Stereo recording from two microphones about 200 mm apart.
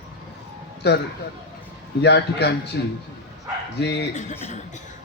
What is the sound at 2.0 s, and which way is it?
A man's voice, 60° left (ahead or behind).